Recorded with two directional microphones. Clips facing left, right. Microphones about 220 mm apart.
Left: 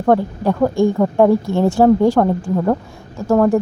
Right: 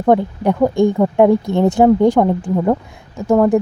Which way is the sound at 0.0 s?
15° right (ahead or behind).